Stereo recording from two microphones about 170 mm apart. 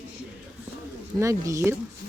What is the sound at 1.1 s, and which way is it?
Speech, 20° right (ahead or behind).